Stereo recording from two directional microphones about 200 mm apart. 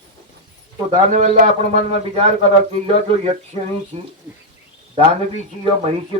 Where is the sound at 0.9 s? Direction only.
30° right (ahead or behind).